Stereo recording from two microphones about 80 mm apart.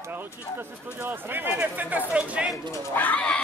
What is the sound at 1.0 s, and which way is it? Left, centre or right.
Speech, right.